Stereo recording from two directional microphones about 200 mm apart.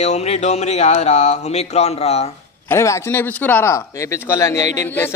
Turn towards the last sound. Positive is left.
turn(degrees=15)  # may be behind; listen again after turning